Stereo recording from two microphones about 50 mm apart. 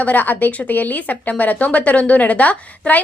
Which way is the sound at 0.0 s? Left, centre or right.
Left.